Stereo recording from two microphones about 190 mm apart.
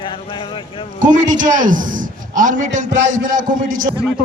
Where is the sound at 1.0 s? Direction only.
45° right (ahead or behind).